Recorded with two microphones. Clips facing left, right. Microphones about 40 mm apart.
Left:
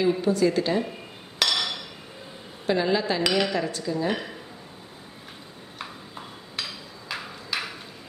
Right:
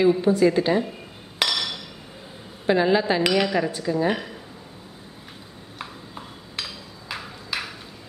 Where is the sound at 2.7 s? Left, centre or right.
Right.